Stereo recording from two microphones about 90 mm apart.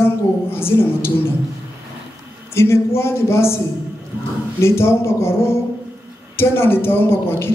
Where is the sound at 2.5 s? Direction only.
30° left (ahead or behind).